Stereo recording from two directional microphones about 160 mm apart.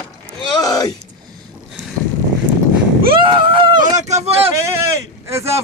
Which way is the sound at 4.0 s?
45° right (ahead or behind).